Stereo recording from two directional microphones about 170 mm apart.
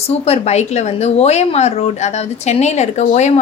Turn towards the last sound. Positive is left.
turn(degrees=40)  # may be behind; listen again after turning